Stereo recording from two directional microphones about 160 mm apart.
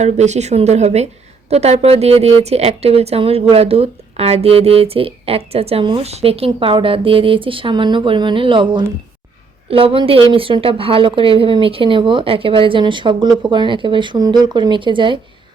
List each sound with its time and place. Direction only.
0.0 s speech: 45° right (ahead or behind)